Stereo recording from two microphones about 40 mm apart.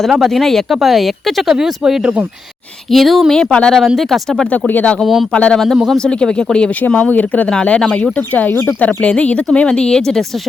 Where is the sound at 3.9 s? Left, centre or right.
Centre.